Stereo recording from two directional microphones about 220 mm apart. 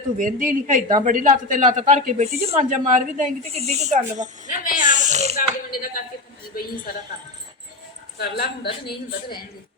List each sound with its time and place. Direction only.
0.2 s speech: 35° right (ahead or behind)
4.4 s speech: 35° left (ahead or behind)
4.9 s a sound: 30° right (ahead or behind)
5.4 s speech: 40° left (ahead or behind)
8.2 s a woman's voice: 45° left (ahead or behind)